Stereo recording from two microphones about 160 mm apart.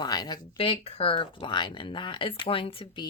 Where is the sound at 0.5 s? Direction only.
40° left (ahead or behind).